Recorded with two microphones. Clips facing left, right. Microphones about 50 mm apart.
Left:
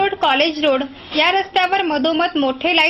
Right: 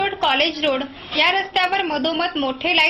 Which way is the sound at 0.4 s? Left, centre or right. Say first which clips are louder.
Left 4 dB; left.